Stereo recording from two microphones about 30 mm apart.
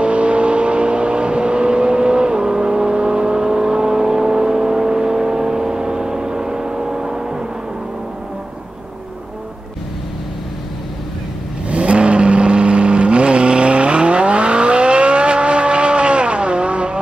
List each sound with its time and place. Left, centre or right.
0.0 s vehicle: right; by 7.4 s centre
11.7 s vehicle: right